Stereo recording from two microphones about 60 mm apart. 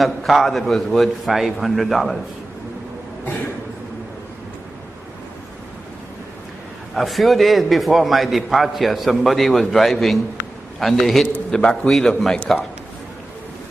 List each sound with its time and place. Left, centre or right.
0.0 s a man's voice: centre
7.0 s a man's voice: centre